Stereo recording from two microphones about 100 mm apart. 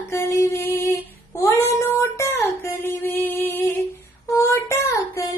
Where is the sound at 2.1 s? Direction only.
25° left (ahead or behind).